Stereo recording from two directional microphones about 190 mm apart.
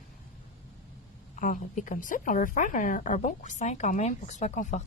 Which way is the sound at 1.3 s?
45° left (ahead or behind).